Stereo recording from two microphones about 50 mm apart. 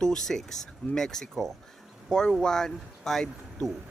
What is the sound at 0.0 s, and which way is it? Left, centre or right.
Speech, centre.